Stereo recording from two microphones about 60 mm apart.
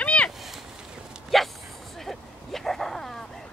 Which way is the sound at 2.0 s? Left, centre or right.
Centre.